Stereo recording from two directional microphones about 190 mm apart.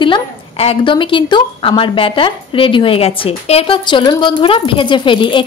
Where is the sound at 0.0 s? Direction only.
30° left (ahead or behind).